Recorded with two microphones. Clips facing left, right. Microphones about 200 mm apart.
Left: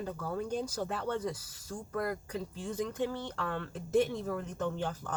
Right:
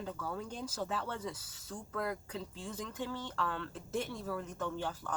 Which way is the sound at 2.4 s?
15° left (ahead or behind).